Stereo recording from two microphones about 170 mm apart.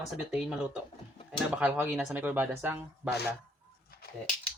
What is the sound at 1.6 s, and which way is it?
Speech, 10° right (ahead or behind).